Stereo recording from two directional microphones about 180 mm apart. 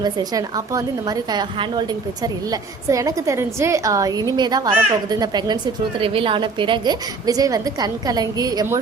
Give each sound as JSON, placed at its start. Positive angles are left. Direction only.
{"t": 0.0, "sound": "a woman's voice", "side_deg": -20}